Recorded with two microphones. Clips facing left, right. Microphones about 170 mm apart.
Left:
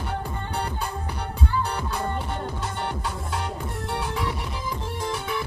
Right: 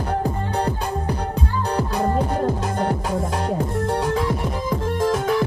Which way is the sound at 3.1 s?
90° right.